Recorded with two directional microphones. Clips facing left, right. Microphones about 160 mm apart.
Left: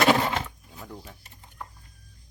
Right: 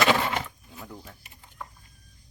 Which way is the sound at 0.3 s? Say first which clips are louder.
Left 1 dB; centre (ahead or behind).